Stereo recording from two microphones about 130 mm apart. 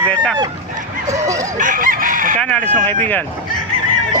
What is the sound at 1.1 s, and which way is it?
Fowl, 25° right (ahead or behind).